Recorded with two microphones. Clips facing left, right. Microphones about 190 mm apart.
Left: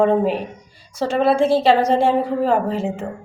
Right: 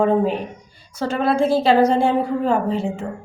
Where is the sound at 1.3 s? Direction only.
30° left (ahead or behind).